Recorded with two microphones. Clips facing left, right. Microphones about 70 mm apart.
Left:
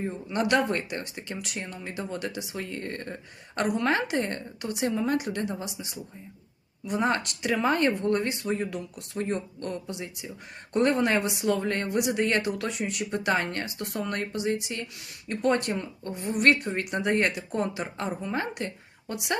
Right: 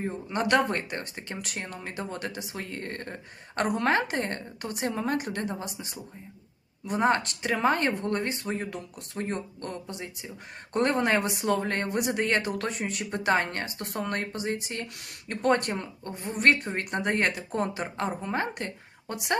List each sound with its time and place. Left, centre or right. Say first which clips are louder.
0.3 s speech: even; right